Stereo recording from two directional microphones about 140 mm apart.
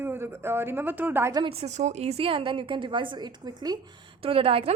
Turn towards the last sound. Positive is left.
turn(degrees=-45)  # may be behind; listen again after turning